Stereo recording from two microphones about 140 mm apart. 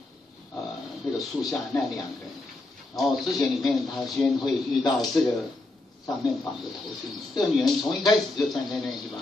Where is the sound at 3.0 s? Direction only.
Centre (ahead or behind).